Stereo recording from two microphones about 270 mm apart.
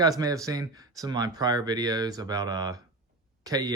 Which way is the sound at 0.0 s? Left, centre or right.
Centre.